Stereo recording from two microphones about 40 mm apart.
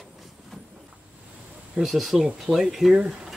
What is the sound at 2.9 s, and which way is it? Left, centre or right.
Speech, centre.